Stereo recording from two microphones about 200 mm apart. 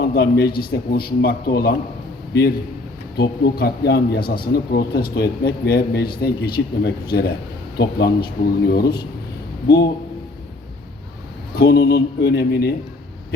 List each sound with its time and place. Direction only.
0.0 s a man's voice: 50° left (ahead or behind)
3.2 s a man's voice: 50° left (ahead or behind)
11.5 s a man's voice: 50° left (ahead or behind)